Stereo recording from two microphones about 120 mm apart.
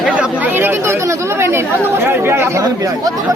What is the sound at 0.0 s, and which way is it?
Chatter, 10° right (ahead or behind).